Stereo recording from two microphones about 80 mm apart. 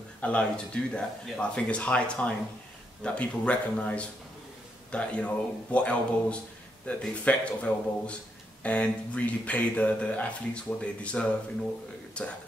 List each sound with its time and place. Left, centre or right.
0.2 s speech: centre